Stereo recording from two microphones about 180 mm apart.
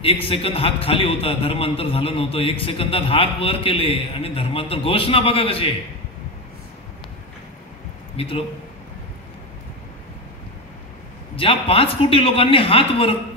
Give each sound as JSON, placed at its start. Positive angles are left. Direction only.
{"t": 0.0, "sound": "a man's voice", "side_deg": 30}
{"t": 8.2, "sound": "a man's voice", "side_deg": 30}
{"t": 11.3, "sound": "a man's voice", "side_deg": 30}